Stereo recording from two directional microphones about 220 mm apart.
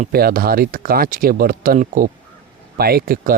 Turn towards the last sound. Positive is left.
turn(degrees=-40)  # may be behind; listen again after turning